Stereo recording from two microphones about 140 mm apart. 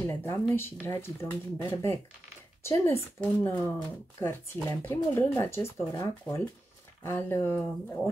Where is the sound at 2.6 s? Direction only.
20° left (ahead or behind).